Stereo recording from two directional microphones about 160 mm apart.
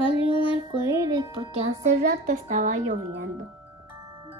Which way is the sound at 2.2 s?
55° right (ahead or behind).